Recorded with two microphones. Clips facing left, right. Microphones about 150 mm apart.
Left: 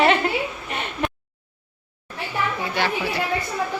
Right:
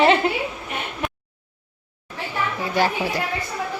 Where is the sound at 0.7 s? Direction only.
10° right (ahead or behind).